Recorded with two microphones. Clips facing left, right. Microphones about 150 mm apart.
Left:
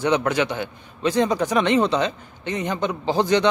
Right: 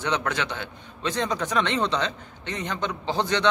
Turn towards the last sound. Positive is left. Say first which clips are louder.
# left 5 dB
turn(degrees=10)  # may be behind; listen again after turning